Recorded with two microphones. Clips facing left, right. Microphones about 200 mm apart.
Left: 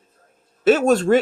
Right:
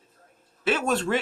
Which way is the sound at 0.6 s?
45° left (ahead or behind).